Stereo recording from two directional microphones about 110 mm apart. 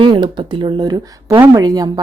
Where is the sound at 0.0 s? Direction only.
45° right (ahead or behind).